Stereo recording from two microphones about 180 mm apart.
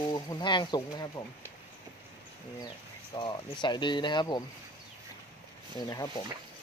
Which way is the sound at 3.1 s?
25° left (ahead or behind).